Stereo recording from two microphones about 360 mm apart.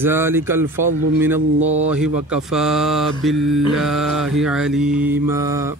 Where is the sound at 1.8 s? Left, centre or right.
Centre.